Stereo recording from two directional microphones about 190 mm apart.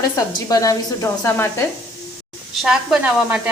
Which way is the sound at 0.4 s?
20° left (ahead or behind).